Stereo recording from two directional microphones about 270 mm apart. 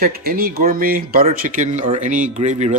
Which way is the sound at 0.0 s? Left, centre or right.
Right.